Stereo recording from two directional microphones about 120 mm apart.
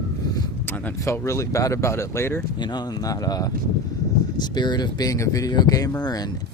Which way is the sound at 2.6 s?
35° left (ahead or behind).